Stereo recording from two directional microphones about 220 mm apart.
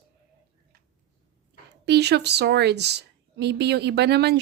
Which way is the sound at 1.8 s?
50° right (ahead or behind).